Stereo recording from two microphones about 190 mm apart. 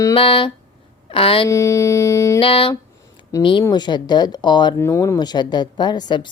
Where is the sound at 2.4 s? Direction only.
25° left (ahead or behind).